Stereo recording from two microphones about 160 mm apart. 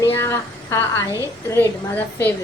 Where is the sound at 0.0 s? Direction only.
15° left (ahead or behind).